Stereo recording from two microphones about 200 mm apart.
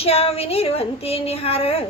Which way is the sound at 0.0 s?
30° left (ahead or behind).